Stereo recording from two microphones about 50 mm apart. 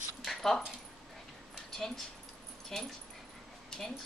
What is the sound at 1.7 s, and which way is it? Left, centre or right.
Speech, centre.